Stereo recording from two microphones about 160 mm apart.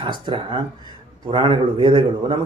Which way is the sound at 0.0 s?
30° right (ahead or behind).